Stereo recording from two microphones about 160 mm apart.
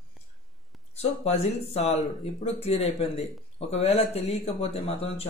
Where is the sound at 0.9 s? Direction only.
45° left (ahead or behind).